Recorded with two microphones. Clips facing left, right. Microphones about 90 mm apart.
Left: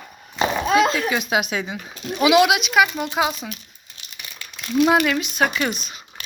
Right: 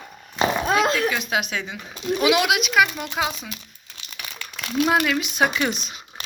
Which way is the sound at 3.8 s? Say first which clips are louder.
Right 3 dB; 80° right.